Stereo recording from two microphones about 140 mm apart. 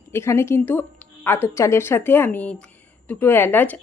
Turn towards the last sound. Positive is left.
turn(degrees=10)  # may be behind; listen again after turning